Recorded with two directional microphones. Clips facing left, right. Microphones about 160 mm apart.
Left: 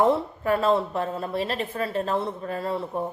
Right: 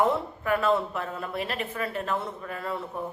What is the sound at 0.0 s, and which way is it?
A woman's voice, 30° left (ahead or behind).